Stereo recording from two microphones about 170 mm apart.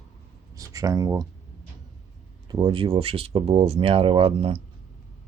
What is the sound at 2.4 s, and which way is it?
Speech, 30° right (ahead or behind).